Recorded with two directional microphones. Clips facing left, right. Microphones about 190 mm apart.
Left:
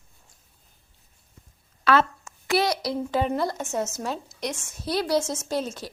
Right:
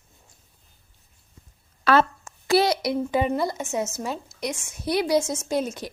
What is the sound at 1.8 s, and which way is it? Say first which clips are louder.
A woman's voice: right 2 dB; 35° right (ahead or behind).